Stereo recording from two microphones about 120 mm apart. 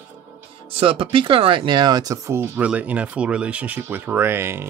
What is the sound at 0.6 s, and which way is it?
Speech, 50° right (ahead or behind).